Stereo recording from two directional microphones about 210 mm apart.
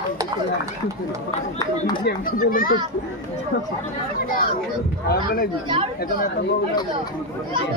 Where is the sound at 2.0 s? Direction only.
40° left (ahead or behind).